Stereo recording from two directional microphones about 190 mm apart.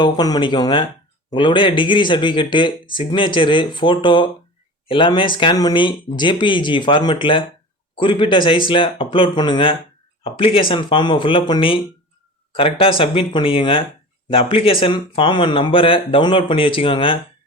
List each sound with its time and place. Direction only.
0.0 s speech: 20° left (ahead or behind)